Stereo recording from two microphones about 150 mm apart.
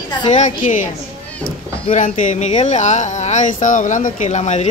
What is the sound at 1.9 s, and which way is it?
Speech, 55° left (ahead or behind).